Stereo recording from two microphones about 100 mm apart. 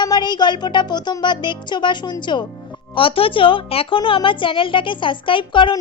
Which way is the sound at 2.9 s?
65° left (ahead or behind).